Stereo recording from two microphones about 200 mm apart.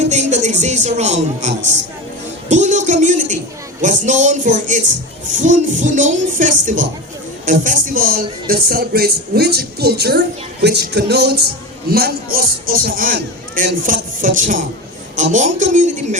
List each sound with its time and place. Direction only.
0.0 s speech: 35° right (ahead or behind)